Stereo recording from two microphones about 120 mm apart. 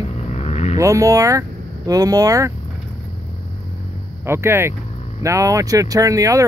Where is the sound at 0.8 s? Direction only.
25° right (ahead or behind).